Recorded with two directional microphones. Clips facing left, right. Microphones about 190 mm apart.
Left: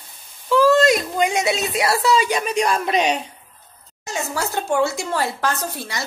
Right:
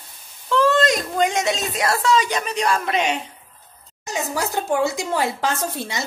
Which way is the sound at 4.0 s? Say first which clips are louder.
Right 1 dB; 15° right (ahead or behind).